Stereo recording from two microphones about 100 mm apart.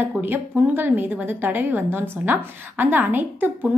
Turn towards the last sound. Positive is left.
turn(degrees=-20)  # may be behind; listen again after turning